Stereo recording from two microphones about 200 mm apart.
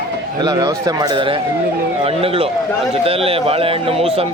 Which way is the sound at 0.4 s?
20° right (ahead or behind).